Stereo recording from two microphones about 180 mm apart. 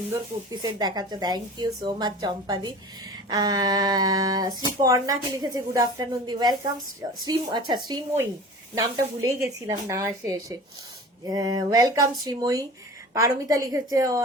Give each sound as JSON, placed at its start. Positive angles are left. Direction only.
{"t": 0.1, "sound": "speech", "side_deg": -20}
{"t": 7.9, "sound": "speech", "side_deg": -15}